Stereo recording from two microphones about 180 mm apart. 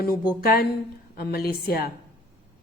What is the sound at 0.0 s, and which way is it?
A woman's voice, 55° left (ahead or behind).